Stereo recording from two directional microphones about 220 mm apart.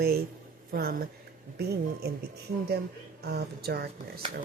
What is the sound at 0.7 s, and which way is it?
Speech, 45° right (ahead or behind).